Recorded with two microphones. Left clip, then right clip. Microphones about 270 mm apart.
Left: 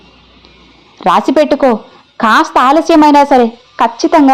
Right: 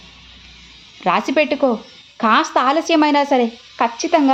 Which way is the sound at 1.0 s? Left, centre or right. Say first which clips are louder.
Left 7 dB; left.